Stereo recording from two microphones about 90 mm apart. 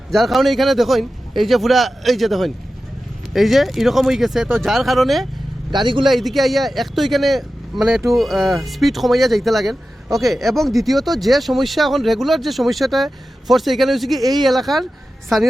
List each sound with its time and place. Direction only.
0.1 s speech: centre (ahead or behind)
5.7 s speech: 65° right (ahead or behind)
6.1 s speech: centre (ahead or behind)